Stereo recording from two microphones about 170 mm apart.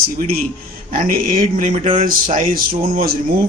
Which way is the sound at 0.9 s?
55° right (ahead or behind).